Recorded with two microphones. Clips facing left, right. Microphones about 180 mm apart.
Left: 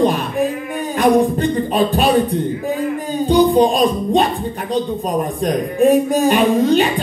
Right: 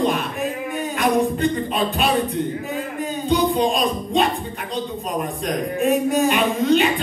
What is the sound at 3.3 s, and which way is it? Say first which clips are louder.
Music: left 7 dB; 35° left (ahead or behind).